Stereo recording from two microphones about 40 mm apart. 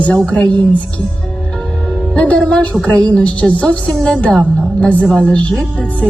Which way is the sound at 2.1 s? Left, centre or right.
Left.